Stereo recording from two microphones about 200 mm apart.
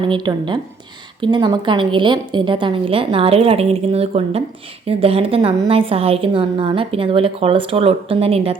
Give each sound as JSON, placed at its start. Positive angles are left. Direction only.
{"t": 0.1, "sound": "a woman's voice", "side_deg": -25}